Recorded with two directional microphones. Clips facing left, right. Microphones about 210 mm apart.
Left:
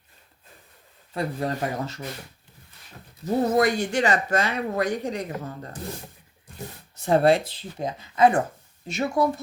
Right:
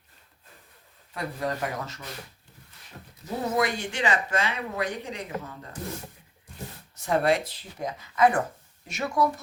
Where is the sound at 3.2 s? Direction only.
40° left (ahead or behind).